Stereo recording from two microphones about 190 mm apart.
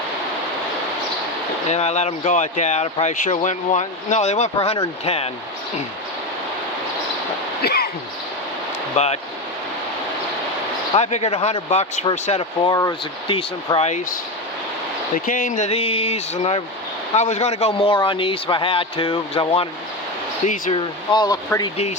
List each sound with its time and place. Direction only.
1.7 s speech: 35° left (ahead or behind)
7.6 s a sound: 55° left (ahead or behind)
10.9 s speech: 35° left (ahead or behind)
21.1 s speech: 20° left (ahead or behind)